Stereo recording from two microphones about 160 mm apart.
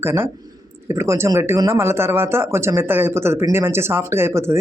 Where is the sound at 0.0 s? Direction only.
15° right (ahead or behind).